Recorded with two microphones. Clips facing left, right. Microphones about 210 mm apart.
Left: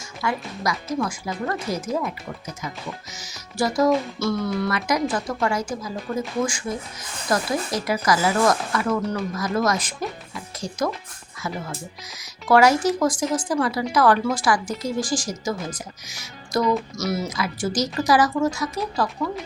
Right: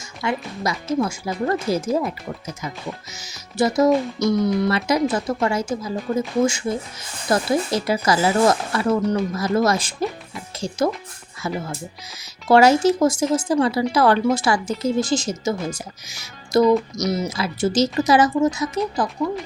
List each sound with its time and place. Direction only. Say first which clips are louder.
0.2 s speech: right 2 dB; 25° right (ahead or behind)
3.2 s speech: right 4 dB; 20° right (ahead or behind)